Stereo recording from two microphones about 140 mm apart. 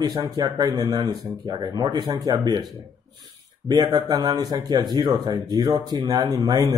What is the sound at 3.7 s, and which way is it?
Speech, 30° right (ahead or behind).